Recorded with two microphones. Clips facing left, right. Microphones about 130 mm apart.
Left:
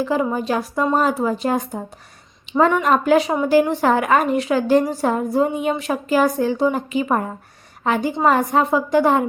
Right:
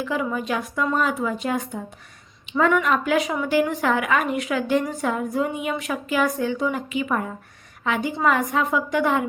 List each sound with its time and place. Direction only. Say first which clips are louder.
0.0 s a woman's voice: left 5 dB; 35° left (ahead or behind)